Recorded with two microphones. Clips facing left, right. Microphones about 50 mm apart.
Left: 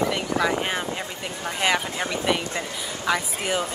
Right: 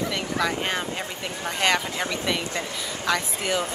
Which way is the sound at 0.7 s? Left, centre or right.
Centre.